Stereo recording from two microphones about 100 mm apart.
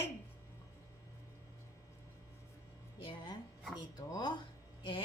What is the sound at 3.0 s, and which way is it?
Music, 60° left (ahead or behind).